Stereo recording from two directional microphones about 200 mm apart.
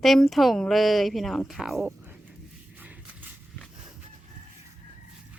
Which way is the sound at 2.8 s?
10° right (ahead or behind).